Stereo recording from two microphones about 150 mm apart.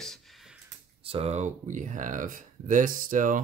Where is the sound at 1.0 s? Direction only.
40° right (ahead or behind); by 3.4 s 60° right (ahead or behind).